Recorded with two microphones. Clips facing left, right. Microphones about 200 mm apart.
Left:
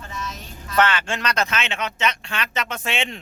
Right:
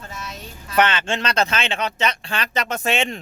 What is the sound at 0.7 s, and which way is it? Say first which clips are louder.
Speech: right 1 dB; 20° right (ahead or behind).